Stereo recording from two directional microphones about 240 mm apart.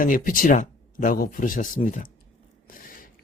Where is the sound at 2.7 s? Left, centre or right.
Left.